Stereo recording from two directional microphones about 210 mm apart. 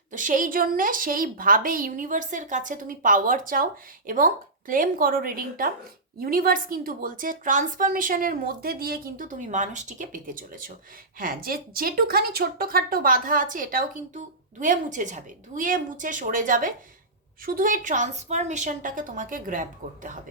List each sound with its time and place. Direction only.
0.1 s a woman's voice: 40° right (ahead or behind)